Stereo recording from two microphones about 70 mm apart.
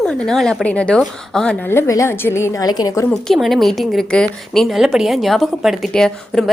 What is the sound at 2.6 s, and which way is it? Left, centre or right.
Speech, left.